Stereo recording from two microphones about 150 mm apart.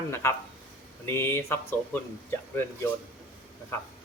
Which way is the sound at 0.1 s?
15° left (ahead or behind).